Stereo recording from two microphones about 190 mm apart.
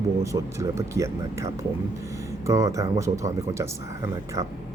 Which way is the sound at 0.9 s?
15° right (ahead or behind).